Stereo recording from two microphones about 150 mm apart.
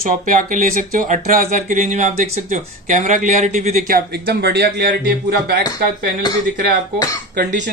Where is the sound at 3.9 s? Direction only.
90° right.